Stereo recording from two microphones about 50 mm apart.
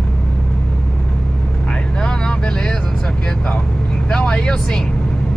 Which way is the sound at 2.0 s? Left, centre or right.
Centre.